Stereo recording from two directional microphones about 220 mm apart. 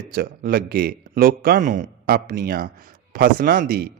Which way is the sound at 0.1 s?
40° right (ahead or behind).